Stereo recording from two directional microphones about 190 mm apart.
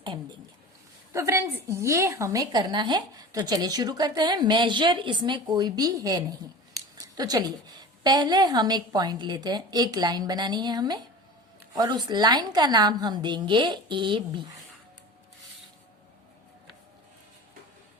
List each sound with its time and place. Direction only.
1.1 s a woman's voice: 15° right (ahead or behind)
6.7 s a sound: 20° right (ahead or behind)
8.0 s a woman's voice: 20° right (ahead or behind)